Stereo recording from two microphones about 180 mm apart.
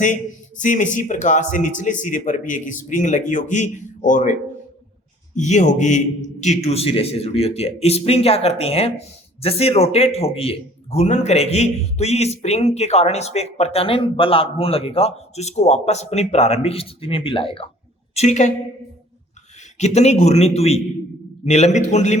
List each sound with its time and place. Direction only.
0.6 s a man's voice: 45° left (ahead or behind)
19.8 s a man's voice: 40° left (ahead or behind)